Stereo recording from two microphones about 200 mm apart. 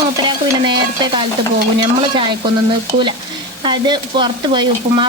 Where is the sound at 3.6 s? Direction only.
25° right (ahead or behind).